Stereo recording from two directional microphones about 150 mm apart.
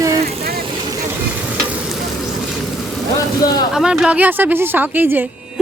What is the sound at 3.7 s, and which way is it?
Speech, 5° right (ahead or behind).